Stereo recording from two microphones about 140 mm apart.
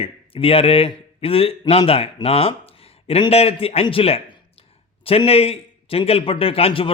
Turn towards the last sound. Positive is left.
turn(degrees=40)  # may be behind; listen again after turning